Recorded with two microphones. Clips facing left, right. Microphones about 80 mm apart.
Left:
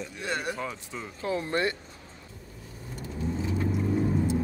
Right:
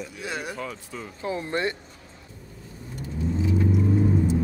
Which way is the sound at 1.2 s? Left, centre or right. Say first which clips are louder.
Right 1 dB; right.